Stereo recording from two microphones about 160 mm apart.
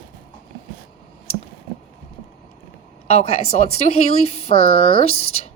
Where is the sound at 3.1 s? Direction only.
40° left (ahead or behind).